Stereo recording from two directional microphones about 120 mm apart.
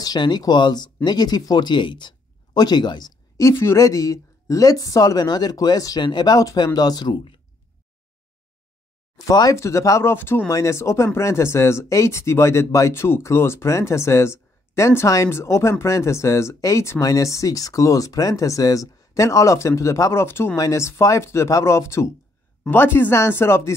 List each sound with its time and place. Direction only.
0.0 s speech: 35° left (ahead or behind)
9.2 s speech: 30° left (ahead or behind)